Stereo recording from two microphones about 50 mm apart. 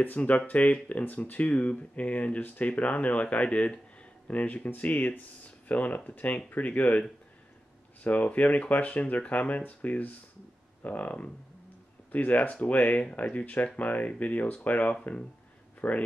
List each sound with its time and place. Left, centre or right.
0.2 s speech: left
8.0 s speech: left